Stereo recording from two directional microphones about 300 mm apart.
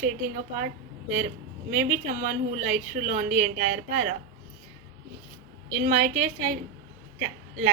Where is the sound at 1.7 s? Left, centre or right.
Right.